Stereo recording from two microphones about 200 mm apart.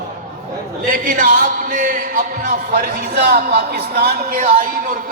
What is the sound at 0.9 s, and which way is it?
Speech, 45° right (ahead or behind).